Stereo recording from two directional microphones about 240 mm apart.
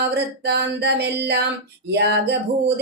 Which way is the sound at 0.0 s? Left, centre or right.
Right.